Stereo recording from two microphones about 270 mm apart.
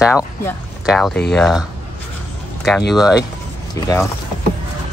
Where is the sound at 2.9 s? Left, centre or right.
Centre.